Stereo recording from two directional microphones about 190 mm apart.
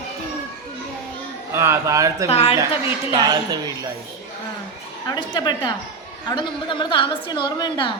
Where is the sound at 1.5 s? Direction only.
15° right (ahead or behind).